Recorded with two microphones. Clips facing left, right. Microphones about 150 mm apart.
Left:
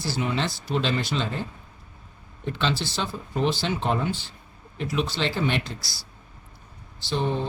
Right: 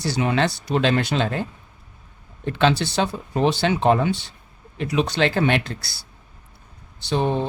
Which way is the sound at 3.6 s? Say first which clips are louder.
Right 7 dB; 75° right (ahead or behind).